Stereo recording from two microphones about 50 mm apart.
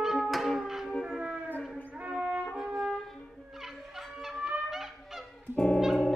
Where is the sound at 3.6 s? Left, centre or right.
Centre.